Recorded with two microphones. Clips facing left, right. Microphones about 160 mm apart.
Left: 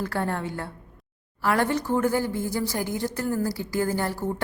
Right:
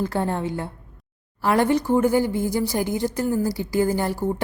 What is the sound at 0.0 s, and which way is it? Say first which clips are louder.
A woman's voice: right 4 dB; 20° right (ahead or behind).